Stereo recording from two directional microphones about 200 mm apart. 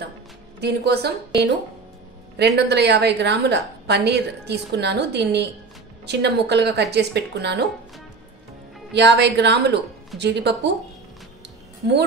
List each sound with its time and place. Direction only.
0.6 s a woman's voice: 55° right (ahead or behind)
8.9 s a woman's voice: 60° right (ahead or behind)